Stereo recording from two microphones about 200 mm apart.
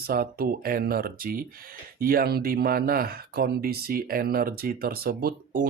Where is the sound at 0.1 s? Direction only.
50° right (ahead or behind).